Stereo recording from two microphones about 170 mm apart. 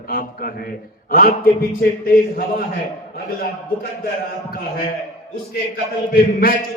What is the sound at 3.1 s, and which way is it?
A man's voice, 60° left (ahead or behind).